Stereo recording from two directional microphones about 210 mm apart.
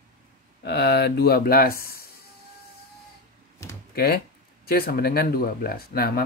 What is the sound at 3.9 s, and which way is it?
Speech, 50° left (ahead or behind).